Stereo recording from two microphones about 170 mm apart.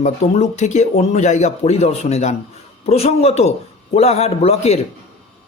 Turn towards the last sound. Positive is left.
turn(degrees=40)  # may be behind; listen again after turning